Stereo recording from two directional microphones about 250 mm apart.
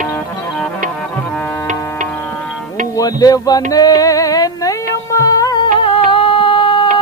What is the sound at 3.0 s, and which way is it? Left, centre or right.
Speech, centre.